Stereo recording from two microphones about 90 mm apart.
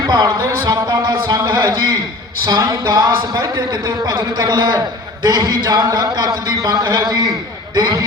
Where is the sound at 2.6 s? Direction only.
30° right (ahead or behind).